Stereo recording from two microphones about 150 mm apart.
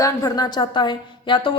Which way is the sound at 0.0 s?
25° left (ahead or behind).